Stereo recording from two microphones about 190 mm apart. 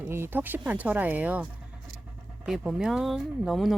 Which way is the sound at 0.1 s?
10° right (ahead or behind).